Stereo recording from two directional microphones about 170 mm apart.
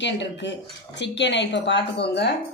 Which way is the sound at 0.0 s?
90° left.